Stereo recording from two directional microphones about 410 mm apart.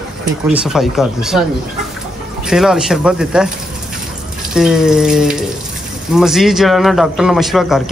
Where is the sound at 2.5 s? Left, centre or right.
Centre.